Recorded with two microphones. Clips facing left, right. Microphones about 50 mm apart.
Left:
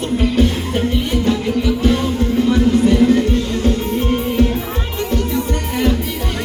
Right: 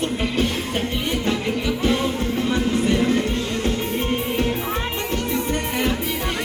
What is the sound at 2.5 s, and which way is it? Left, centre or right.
Music, right.